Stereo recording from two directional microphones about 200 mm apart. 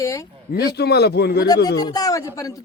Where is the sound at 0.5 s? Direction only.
55° left (ahead or behind).